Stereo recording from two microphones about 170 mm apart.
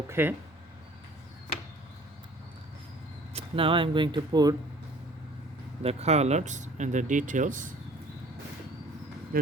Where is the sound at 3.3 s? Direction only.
30° right (ahead or behind).